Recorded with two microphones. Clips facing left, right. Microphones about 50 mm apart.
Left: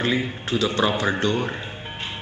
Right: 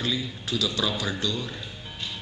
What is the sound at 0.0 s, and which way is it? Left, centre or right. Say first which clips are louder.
Speech: left 6 dB; left.